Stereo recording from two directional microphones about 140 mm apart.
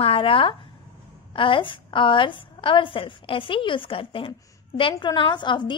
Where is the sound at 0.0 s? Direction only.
40° left (ahead or behind).